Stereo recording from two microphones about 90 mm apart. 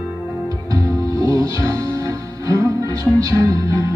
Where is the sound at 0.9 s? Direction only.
40° right (ahead or behind).